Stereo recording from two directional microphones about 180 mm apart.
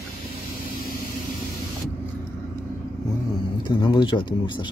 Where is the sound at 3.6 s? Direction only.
25° left (ahead or behind).